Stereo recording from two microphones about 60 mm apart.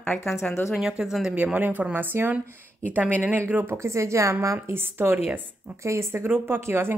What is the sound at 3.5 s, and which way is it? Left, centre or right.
Speech, right.